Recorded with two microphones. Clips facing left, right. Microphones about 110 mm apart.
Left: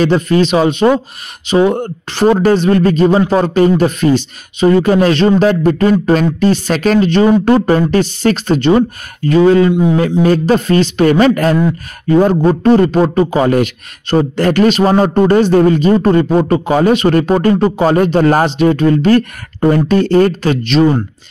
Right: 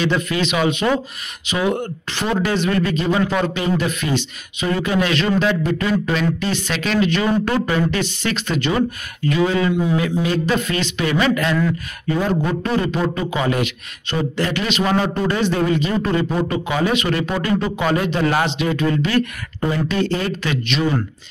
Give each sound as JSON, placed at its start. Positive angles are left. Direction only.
{"t": 0.0, "sound": "a man's voice", "side_deg": 40}